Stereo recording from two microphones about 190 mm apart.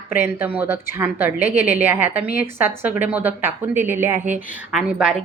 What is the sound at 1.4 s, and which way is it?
Speech, 45° left (ahead or behind).